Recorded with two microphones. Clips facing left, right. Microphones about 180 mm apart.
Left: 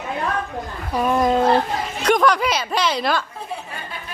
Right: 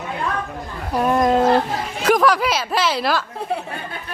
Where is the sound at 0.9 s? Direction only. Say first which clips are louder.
Right 1 dB; centre (ahead or behind).